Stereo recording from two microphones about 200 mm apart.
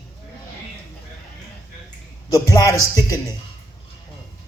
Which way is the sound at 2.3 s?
15° left (ahead or behind).